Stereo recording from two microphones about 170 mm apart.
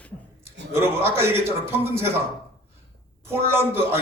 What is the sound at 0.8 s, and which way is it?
A man's voice, 15° right (ahead or behind).